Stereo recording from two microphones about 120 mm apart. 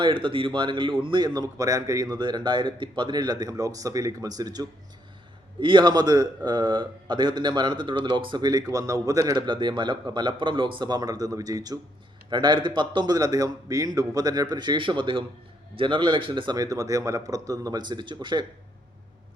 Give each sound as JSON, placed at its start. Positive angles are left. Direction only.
{"t": 0.0, "sound": "speech", "side_deg": -45}
{"t": 1.3, "sound": "a man's voice", "side_deg": -30}
{"t": 5.5, "sound": "a man's voice", "side_deg": -40}